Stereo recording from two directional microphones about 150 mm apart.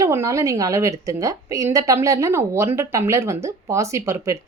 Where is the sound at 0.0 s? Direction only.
20° right (ahead or behind).